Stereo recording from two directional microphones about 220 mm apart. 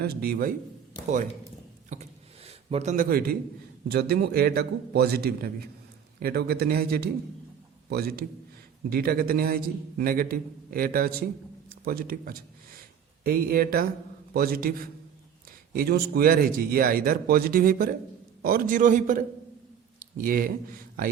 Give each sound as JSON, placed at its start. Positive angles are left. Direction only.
{"t": 0.0, "sound": "a man's voice", "side_deg": -45}
{"t": 1.9, "sound": "a sound", "side_deg": -30}
{"t": 3.8, "sound": "a man's voice", "side_deg": -45}